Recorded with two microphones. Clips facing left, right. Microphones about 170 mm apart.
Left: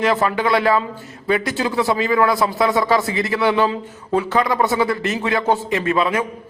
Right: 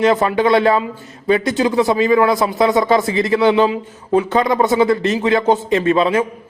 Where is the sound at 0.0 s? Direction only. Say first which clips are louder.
Right 4 dB; 25° right (ahead or behind).